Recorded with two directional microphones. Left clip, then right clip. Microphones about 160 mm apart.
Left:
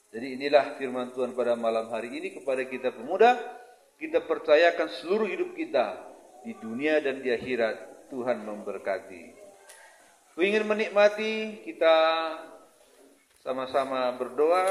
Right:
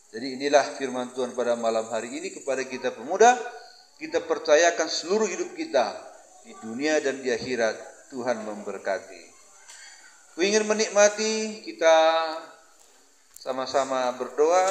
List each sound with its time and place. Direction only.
0.1 s a man's voice: 20° right (ahead or behind)
4.0 s a man's voice: 20° right (ahead or behind)
6.9 s a man's voice: 20° right (ahead or behind)
10.3 s a man's voice: 20° right (ahead or behind)
13.4 s a man's voice: 20° right (ahead or behind)